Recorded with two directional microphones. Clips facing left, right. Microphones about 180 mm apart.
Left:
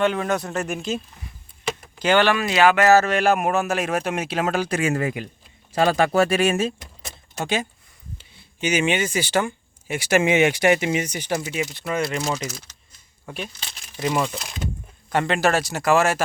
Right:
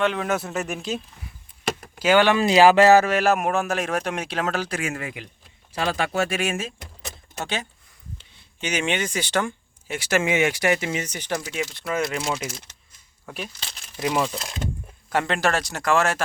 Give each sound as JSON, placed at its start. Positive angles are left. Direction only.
{"t": 0.0, "sound": "speech", "side_deg": 0}
{"t": 2.3, "sound": "speech", "side_deg": -25}
{"t": 2.9, "sound": "speech", "side_deg": -10}
{"t": 4.8, "sound": "speech", "side_deg": 35}
{"t": 7.4, "sound": "speech", "side_deg": 10}